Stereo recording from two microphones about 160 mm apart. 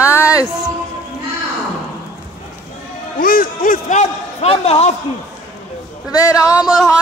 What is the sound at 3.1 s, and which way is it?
A man's voice, 65° left (ahead or behind).